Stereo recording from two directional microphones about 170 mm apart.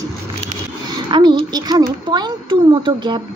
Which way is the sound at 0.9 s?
25° right (ahead or behind).